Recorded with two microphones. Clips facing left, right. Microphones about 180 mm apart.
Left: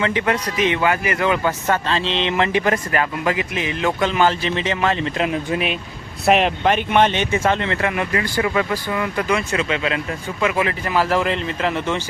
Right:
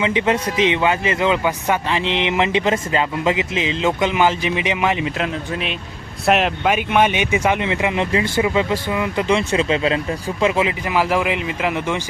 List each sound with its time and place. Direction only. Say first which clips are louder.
0.0 s a man's voice: right 2 dB; 20° right (ahead or behind)
5.5 s speech: left 3 dB; 10° left (ahead or behind); by 11.9 s 10° right (ahead or behind)